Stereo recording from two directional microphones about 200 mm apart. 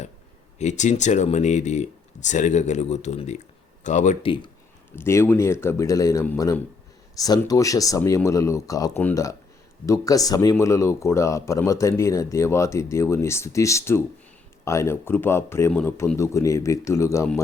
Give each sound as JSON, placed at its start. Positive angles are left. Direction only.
{"t": 0.6, "sound": "speech", "side_deg": 35}
{"t": 4.9, "sound": "speech", "side_deg": 10}